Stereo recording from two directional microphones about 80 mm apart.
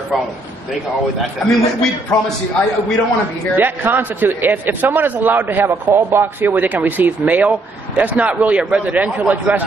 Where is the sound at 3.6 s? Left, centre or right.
Right.